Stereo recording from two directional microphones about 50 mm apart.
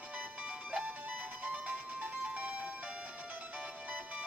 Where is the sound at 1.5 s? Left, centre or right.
Right.